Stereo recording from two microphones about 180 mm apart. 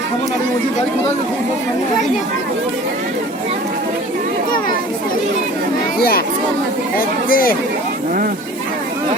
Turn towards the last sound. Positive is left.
turn(degrees=50)  # may be behind; listen again after turning